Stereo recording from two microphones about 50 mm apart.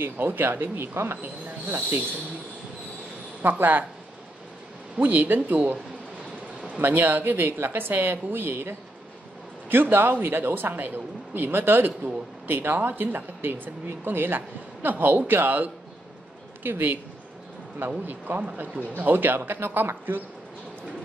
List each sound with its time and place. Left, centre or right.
0.0 s speech: right
3.4 s speech: right
4.9 s speech: right
7.0 s speech: right